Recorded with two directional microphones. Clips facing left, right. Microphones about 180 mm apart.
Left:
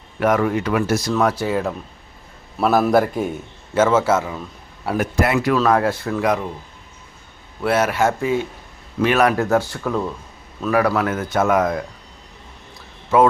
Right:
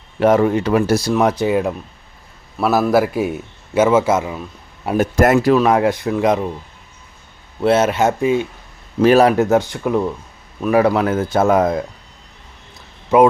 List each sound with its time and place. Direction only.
0.2 s speech: 30° right (ahead or behind)
1.1 s a man's voice: 20° right (ahead or behind)
2.6 s a man's voice: centre (ahead or behind)
5.1 s speech: 45° right (ahead or behind)
5.5 s speech: 20° right (ahead or behind)
7.6 s speech: 25° right (ahead or behind)
9.0 s speech: 35° right (ahead or behind)
13.1 s a man's voice: 20° right (ahead or behind)